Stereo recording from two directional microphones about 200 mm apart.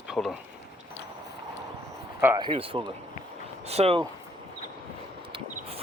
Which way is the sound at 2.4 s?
25° right (ahead or behind).